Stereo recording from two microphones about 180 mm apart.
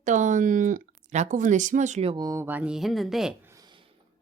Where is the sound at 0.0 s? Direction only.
45° right (ahead or behind).